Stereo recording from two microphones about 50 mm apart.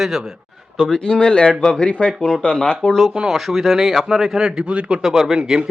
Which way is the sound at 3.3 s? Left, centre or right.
Centre.